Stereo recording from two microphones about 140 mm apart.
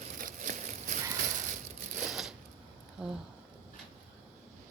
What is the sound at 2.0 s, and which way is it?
Shuffling cards, centre (ahead or behind).